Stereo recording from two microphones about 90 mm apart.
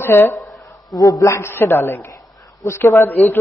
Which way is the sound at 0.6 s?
40° left (ahead or behind).